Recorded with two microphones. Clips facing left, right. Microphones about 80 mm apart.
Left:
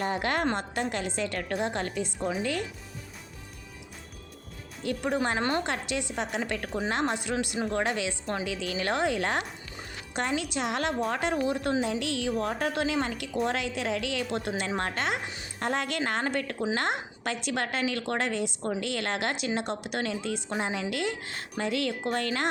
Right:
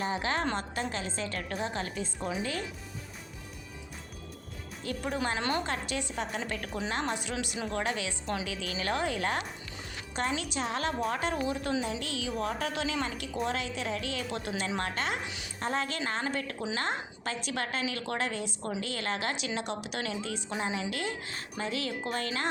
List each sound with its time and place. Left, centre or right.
0.0 s a woman's voice: left
2.4 s speech: right
5.1 s speech: left
6.0 s a woman's voice: left
6.6 s a woman's voice: left
8.4 s speech: right
8.8 s a woman's voice: left
10.2 s a woman's voice: left
12.4 s a woman's voice: left
13.4 s a woman's voice: left
19.5 s a woman's voice: left